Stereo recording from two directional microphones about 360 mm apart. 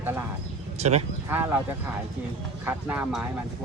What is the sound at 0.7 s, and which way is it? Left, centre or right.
Speech, centre.